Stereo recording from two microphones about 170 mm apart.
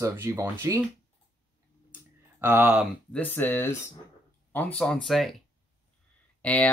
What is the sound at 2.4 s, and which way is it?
Speech, 10° right (ahead or behind).